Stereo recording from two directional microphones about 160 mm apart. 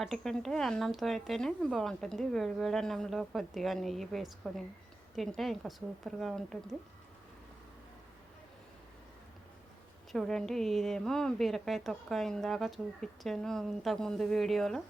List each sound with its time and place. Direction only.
0.0 s a woman's voice: centre (ahead or behind)
10.1 s a woman's voice: 5° left (ahead or behind)